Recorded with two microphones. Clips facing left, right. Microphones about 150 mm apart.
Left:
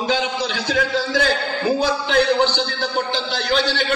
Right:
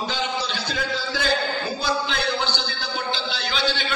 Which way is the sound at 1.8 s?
85° left.